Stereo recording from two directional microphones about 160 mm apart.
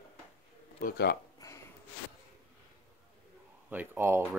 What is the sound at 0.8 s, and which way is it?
Speech, 70° left (ahead or behind).